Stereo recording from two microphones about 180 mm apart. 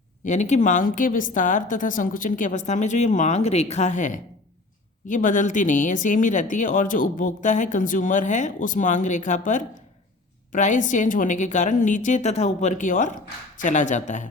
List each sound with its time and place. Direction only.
0.3 s speech: 40° left (ahead or behind)